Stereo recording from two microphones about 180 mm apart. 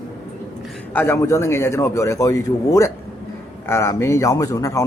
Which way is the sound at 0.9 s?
15° left (ahead or behind).